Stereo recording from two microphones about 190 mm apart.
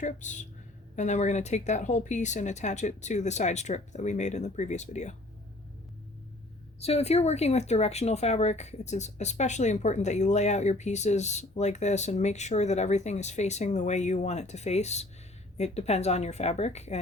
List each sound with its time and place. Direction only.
0.0 s speech: 40° left (ahead or behind)
6.7 s speech: 35° left (ahead or behind)